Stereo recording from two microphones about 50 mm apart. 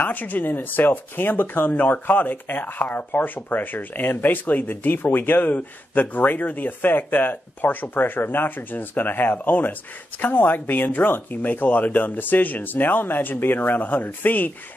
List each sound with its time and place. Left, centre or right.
0.0 s speech: left